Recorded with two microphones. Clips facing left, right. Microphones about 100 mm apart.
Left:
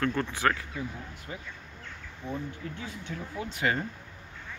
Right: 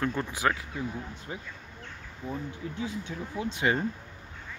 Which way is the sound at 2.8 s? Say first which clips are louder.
Right 4 dB; 20° right (ahead or behind).